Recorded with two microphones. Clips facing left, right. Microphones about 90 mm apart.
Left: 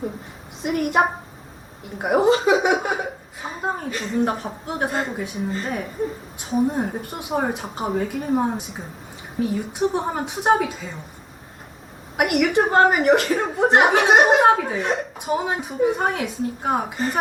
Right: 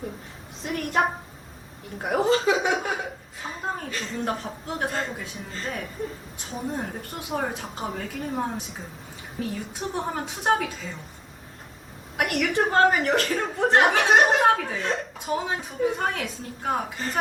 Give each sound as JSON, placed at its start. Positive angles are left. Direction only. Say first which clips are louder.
{"t": 0.6, "sound": "speech", "louder": "left 5 dB", "side_deg": 15}
{"t": 12.1, "sound": "a woman's voice", "louder": "left 6 dB", "side_deg": 10}
{"t": 16.0, "sound": "speech", "louder": "left 5 dB", "side_deg": 15}